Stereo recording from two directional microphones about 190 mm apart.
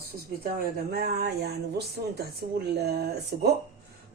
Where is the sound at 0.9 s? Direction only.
55° right (ahead or behind).